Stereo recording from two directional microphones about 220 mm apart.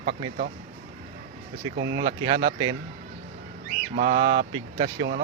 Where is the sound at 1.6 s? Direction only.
60° right (ahead or behind).